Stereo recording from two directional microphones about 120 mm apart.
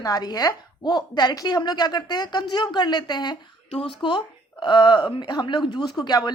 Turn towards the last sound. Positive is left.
turn(degrees=35)  # may be behind; listen again after turning